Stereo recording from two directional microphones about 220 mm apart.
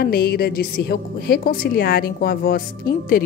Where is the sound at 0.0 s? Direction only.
45° left (ahead or behind).